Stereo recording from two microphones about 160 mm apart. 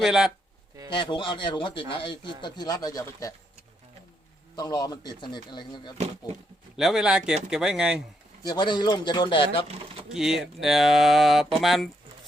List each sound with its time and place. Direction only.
0.0 s speech: 5° right (ahead or behind)
0.9 s a man's voice: 30° left (ahead or behind)
4.5 s speech: 25° left (ahead or behind)
6.7 s speech: 5° right (ahead or behind)
8.4 s speech: 30° left (ahead or behind)
10.1 s speech: 5° right (ahead or behind)